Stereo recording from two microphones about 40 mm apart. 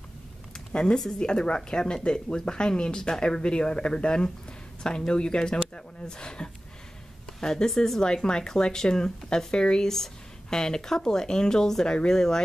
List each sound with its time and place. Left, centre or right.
1.2 s speech: left